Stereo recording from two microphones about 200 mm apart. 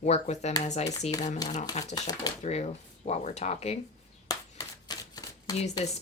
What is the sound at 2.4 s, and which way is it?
Speech, 35° left (ahead or behind).